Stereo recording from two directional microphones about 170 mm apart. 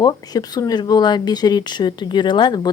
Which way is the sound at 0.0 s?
25° left (ahead or behind).